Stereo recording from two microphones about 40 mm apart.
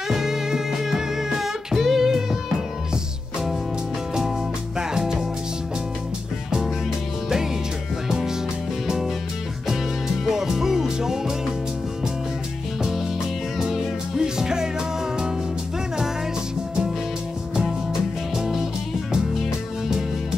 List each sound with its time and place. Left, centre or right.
0.1 s music: centre
4.7 s music: centre
8.1 s music: centre
10.2 s music: centre
13.6 s music: centre
18.3 s music: centre